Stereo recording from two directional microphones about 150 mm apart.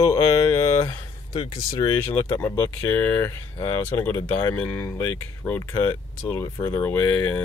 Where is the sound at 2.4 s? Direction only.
15° left (ahead or behind).